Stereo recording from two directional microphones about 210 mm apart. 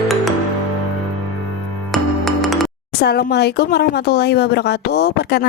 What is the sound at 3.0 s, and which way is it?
A woman's voice, 50° left (ahead or behind).